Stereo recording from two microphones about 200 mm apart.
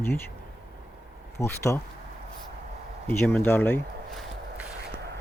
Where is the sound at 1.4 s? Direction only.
15° left (ahead or behind).